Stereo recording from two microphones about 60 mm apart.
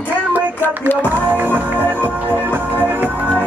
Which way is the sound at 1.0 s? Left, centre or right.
Right.